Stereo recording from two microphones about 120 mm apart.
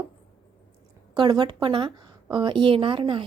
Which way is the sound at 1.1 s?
35° right (ahead or behind).